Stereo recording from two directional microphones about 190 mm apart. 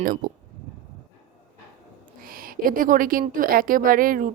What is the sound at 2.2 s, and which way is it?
A woman's voice, 50° right (ahead or behind).